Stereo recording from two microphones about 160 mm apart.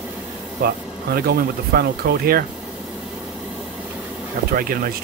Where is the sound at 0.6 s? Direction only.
75° right (ahead or behind).